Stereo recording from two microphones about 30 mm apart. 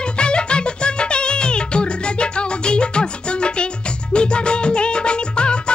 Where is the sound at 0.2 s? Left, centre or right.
Left.